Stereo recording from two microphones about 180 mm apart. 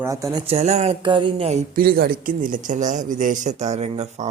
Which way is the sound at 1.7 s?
55° right (ahead or behind).